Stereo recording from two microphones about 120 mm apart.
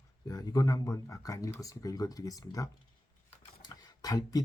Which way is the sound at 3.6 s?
35° left (ahead or behind).